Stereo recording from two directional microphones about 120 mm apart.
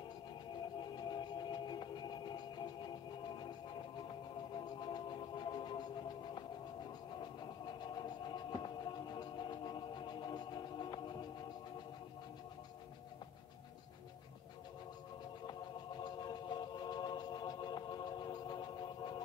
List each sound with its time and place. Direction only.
0.7 s music: 40° left (ahead or behind)
4.6 s music: 35° left (ahead or behind)
7.2 s a sound: 35° left (ahead or behind)
16.0 s music: 35° left (ahead or behind)